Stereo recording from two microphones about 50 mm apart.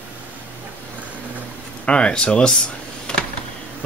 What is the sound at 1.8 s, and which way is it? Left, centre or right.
Speech, left.